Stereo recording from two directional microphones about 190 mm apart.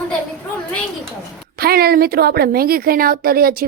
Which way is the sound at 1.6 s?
55° right (ahead or behind).